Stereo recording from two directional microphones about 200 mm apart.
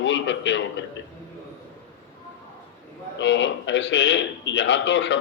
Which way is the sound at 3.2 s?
65° left (ahead or behind).